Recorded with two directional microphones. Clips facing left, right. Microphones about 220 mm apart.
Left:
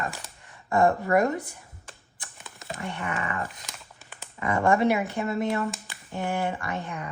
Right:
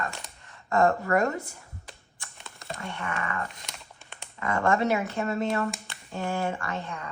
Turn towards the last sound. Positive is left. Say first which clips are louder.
# left 1 dB
turn(degrees=15)  # may be behind; listen again after turning